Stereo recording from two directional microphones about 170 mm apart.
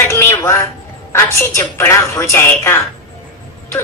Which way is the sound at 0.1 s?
15° left (ahead or behind).